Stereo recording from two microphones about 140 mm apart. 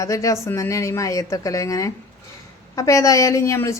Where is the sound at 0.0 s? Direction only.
25° left (ahead or behind).